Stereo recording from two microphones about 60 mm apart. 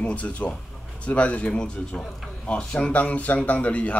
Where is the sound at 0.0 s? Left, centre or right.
Left.